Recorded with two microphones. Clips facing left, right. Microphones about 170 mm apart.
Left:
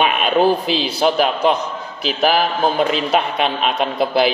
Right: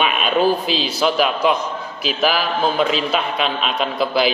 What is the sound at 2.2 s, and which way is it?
A man's voice, 55° left (ahead or behind).